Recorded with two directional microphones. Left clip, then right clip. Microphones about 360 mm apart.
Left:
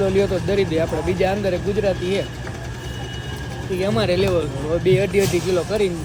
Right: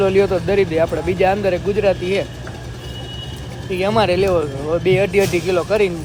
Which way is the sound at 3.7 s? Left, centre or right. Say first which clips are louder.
Right 4 dB; centre.